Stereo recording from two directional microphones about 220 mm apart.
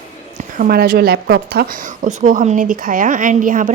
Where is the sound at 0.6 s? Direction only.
40° right (ahead or behind).